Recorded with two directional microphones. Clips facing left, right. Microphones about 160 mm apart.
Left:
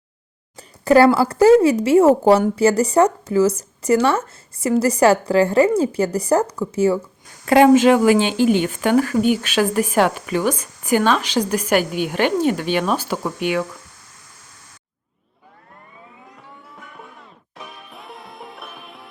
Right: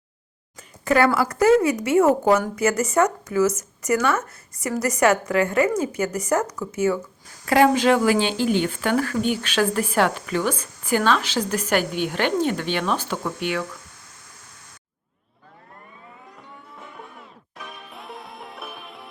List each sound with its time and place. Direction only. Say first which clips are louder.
0.5 s speech: left 7 dB; 35° left (ahead or behind); by 13.6 s 15° left (ahead or behind)
17.9 s music: even; centre (ahead or behind)